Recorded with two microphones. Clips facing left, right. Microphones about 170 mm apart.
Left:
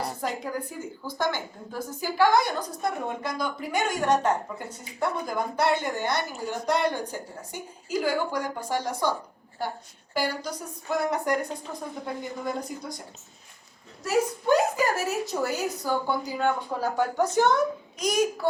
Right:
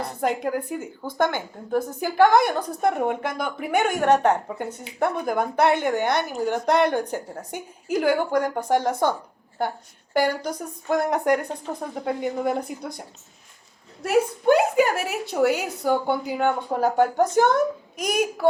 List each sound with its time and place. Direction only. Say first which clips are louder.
0.2 s a woman's voice: right 6 dB; 60° right (ahead or behind)
10.2 s a woman's voice: right 6 dB; 55° right (ahead or behind)
14.0 s a woman's voice: right 5 dB; 60° right (ahead or behind)